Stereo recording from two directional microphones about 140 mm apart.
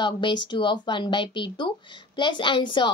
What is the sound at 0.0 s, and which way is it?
A woman's voice, 35° left (ahead or behind).